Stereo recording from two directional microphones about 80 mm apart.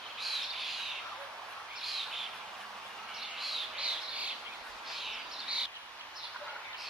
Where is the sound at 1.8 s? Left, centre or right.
Centre.